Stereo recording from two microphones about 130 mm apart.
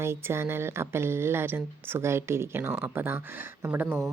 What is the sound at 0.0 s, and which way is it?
A woman's voice, 20° right (ahead or behind).